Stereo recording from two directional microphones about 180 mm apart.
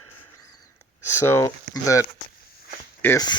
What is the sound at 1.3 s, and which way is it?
Speech, 15° left (ahead or behind).